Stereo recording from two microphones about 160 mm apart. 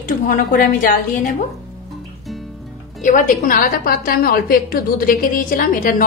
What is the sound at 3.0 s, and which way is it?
A woman's voice, 55° left (ahead or behind).